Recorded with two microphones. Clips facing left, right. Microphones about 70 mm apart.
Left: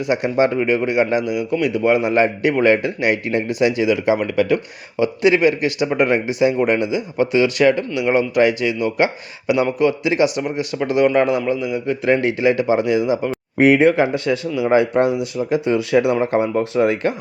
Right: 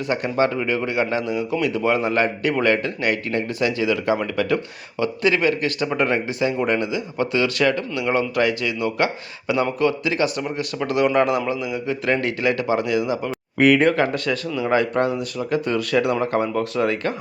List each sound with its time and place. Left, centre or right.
0.0 s a man's voice: centre